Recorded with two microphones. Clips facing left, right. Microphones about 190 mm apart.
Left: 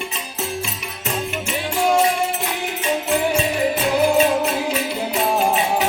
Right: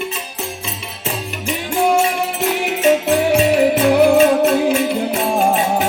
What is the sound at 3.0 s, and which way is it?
Music, 70° right (ahead or behind).